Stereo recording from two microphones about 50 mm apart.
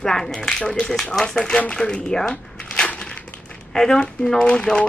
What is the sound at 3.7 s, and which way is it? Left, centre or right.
Speech, centre.